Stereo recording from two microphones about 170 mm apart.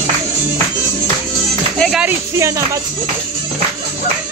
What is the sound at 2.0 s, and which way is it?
Speech, 15° right (ahead or behind).